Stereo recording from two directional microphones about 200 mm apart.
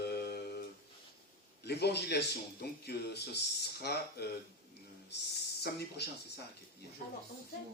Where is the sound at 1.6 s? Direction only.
55° left (ahead or behind).